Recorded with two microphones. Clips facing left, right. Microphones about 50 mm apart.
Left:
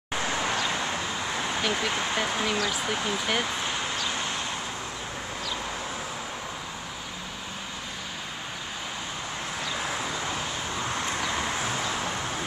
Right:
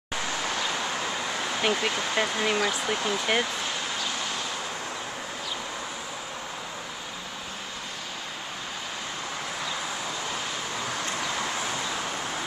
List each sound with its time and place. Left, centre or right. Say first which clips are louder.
1.6 s speech: right 3 dB; right
2.4 s speech: right 2 dB; centre